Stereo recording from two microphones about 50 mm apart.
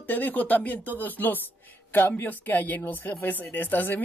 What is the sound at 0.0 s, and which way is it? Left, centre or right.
Speech, left.